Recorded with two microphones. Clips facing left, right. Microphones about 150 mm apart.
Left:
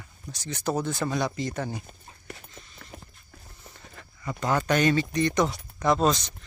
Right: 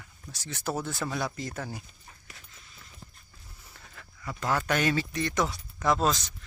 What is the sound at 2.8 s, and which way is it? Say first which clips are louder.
Clip-clop: left 5 dB; 60° left (ahead or behind).